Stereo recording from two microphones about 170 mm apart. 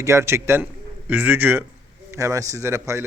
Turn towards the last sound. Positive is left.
turn(degrees=-15)  # may be behind; listen again after turning